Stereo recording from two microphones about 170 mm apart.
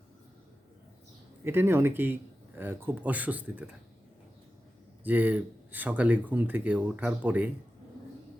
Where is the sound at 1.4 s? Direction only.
15° right (ahead or behind).